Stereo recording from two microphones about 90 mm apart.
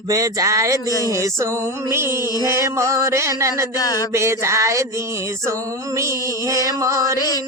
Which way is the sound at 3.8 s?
45° left (ahead or behind).